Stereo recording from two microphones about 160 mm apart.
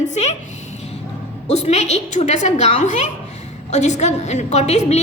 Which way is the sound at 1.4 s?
45° left (ahead or behind).